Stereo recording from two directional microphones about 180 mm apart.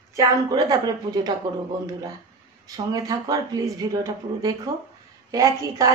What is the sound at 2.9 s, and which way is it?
Speech, 20° right (ahead or behind).